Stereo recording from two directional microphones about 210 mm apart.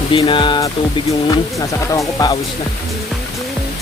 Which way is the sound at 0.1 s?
25° left (ahead or behind).